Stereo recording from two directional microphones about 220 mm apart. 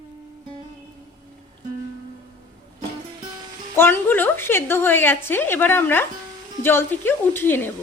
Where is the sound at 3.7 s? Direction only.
10° left (ahead or behind).